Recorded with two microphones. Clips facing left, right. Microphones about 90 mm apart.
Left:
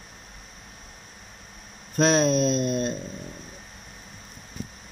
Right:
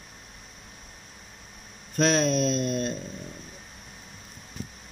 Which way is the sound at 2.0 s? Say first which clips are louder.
Left 3 dB; 25° left (ahead or behind).